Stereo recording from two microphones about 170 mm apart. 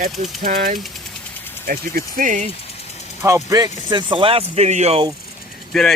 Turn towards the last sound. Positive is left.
turn(degrees=5)  # may be behind; listen again after turning